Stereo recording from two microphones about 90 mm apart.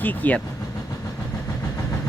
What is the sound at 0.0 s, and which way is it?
Speech, 20° left (ahead or behind).